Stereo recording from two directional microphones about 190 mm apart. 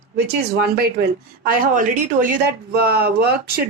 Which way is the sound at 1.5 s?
45° right (ahead or behind).